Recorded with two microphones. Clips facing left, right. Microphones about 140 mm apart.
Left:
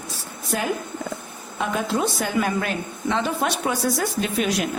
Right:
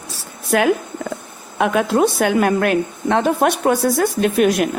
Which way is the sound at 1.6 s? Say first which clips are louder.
Right 8 dB; 65° right (ahead or behind).